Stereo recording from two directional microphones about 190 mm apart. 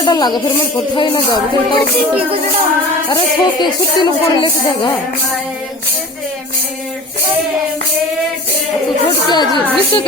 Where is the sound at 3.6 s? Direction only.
20° left (ahead or behind).